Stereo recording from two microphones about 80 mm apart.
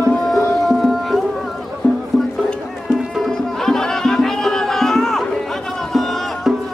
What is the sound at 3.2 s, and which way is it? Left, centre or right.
Music, centre.